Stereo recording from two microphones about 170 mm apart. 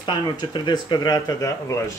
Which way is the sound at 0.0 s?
25° left (ahead or behind).